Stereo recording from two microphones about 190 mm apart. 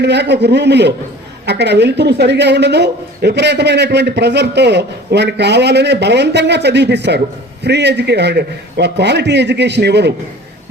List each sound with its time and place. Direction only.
0.0 s a woman's voice: 65° right (ahead or behind)